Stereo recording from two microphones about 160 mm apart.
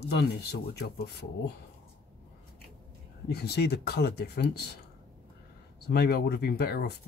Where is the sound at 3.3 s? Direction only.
90° left.